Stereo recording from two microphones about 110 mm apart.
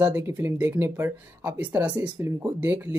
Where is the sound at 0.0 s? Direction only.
20° right (ahead or behind).